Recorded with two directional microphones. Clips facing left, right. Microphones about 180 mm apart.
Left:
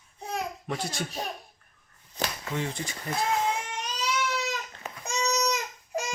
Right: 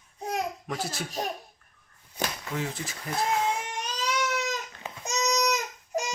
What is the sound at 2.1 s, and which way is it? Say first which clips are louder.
Speech: even; centre (ahead or behind).